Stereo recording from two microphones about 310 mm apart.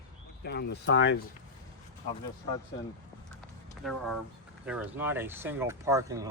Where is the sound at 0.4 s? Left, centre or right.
Left.